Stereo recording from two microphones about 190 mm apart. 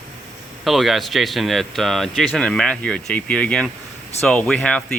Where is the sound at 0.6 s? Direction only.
Centre (ahead or behind).